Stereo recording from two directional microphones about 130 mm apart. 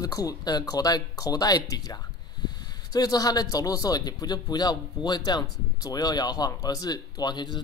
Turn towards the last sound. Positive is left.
turn(degrees=35)  # may be behind; listen again after turning